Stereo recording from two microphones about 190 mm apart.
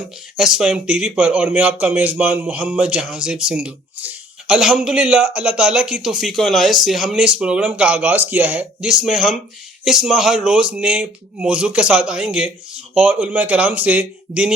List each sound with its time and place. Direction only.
0.3 s speech: 5° right (ahead or behind)